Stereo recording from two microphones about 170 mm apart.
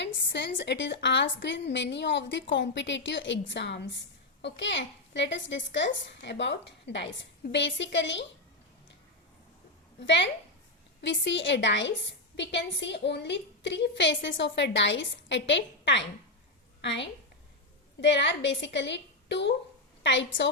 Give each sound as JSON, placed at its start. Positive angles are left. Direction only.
{"t": 0.0, "sound": "a woman's voice", "side_deg": 90}
{"t": 11.0, "sound": "a woman's voice", "side_deg": 90}